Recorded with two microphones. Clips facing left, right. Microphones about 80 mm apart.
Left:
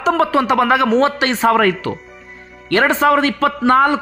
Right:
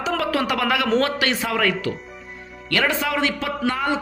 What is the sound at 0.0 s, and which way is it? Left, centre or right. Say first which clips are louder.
Speech: left 7 dB; left.